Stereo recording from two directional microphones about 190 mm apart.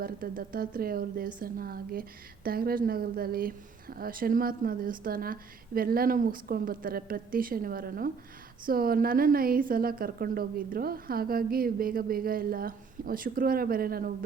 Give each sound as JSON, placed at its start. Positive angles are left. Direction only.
{"t": 0.0, "sound": "speech", "side_deg": -50}